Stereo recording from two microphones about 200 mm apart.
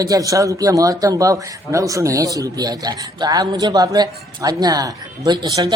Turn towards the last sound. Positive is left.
turn(degrees=-15)  # may be behind; listen again after turning